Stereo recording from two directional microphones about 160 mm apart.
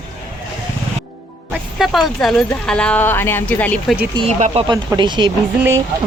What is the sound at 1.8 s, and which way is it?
Speech, centre (ahead or behind).